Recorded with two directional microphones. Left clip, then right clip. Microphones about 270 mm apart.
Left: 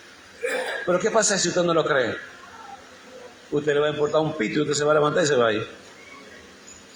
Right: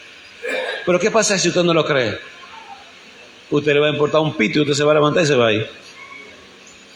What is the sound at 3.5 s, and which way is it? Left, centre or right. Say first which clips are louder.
A man's voice: right 6 dB; right.